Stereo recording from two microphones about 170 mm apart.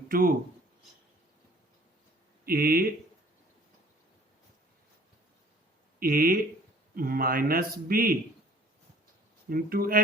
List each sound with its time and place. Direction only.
0.1 s speech: 60° right (ahead or behind)
2.4 s speech: 60° right (ahead or behind)
6.0 s a man's voice: 60° right (ahead or behind)
9.5 s a man's voice: 60° right (ahead or behind)